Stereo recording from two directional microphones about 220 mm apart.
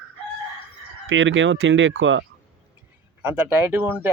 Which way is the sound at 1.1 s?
60° right (ahead or behind).